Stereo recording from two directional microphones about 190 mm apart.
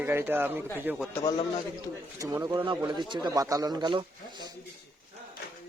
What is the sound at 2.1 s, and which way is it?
Speech, 15° right (ahead or behind).